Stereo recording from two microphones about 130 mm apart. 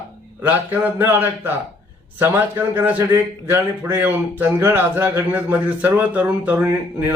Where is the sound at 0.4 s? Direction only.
15° right (ahead or behind).